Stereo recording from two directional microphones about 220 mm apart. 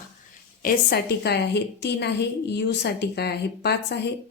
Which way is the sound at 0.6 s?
45° left (ahead or behind).